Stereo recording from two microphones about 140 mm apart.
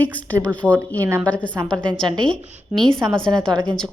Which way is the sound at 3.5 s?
30° right (ahead or behind).